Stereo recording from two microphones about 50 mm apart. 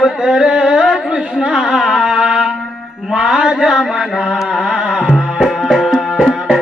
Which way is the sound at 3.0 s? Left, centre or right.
Centre.